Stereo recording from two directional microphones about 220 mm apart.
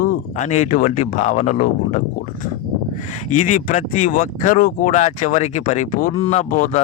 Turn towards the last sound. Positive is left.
turn(degrees=35)  # may be behind; listen again after turning